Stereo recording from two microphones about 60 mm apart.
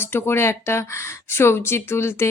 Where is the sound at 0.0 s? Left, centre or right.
Left.